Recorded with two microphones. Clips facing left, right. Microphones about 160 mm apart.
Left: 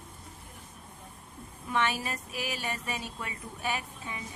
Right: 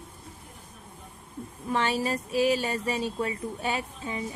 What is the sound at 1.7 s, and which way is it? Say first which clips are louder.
Speech: right 4 dB; 30° right (ahead or behind).